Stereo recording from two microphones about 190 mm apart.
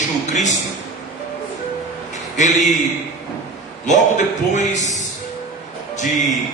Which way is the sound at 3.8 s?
40° left (ahead or behind).